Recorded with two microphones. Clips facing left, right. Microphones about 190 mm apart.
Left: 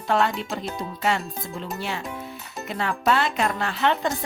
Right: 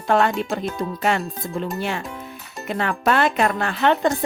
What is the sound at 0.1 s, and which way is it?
Speech, 55° right (ahead or behind).